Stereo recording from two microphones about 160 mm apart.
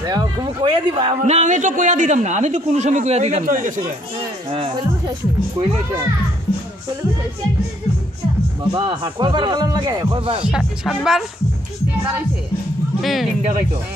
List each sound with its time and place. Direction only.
0.0 s speech: 25° right (ahead or behind)
1.2 s a man's voice: 45° right (ahead or behind)
4.5 s speech: 35° right (ahead or behind)
8.7 s speech: 30° right (ahead or behind)
10.5 s speech: centre (ahead or behind)
13.0 s speech: centre (ahead or behind)
13.4 s a man's voice: 50° right (ahead or behind)